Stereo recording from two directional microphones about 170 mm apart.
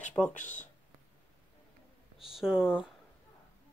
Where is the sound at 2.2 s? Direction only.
5° right (ahead or behind).